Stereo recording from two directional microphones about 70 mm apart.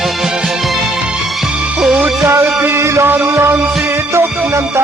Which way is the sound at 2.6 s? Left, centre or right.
Right.